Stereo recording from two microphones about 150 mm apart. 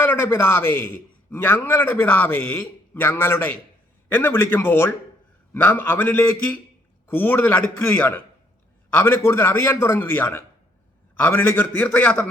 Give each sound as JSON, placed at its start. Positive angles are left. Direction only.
{"t": 0.0, "sound": "a man's voice", "side_deg": 15}